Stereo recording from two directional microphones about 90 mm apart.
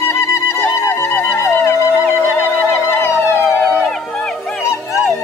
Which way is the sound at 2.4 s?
20° left (ahead or behind).